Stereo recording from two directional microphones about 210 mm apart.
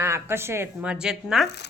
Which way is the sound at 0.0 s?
10° right (ahead or behind).